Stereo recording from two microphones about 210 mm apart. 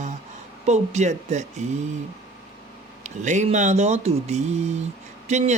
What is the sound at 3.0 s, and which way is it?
A man's voice, 35° right (ahead or behind).